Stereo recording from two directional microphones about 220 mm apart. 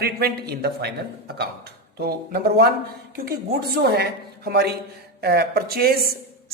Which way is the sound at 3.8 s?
45° right (ahead or behind).